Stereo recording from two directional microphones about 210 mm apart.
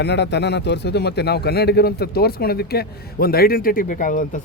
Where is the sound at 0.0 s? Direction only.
55° left (ahead or behind).